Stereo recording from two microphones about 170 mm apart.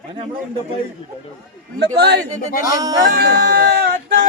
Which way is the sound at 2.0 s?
80° right.